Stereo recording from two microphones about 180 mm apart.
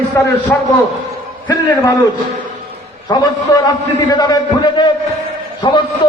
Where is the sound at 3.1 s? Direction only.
20° left (ahead or behind).